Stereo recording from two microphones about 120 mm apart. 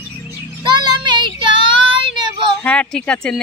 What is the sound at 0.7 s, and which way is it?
Child singing, 40° right (ahead or behind).